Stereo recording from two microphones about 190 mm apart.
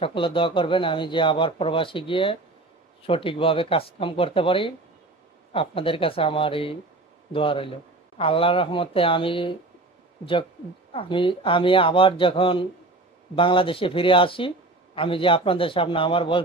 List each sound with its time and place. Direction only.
0.0 s speech: 25° left (ahead or behind)
10.9 s speech: 25° left (ahead or behind)